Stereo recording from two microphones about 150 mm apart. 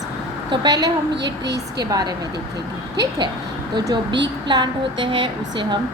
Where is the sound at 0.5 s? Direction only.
25° right (ahead or behind).